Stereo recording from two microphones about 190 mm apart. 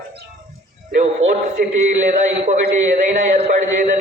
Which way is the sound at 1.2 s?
90° right.